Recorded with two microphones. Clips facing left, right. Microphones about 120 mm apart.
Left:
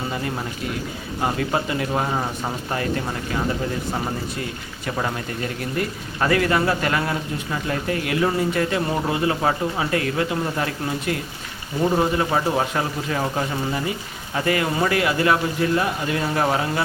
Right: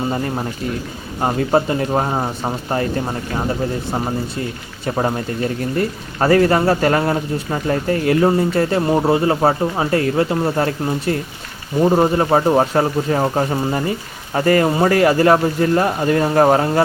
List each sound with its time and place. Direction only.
1.2 s speech: 35° right (ahead or behind)
4.9 s speech: 35° right (ahead or behind)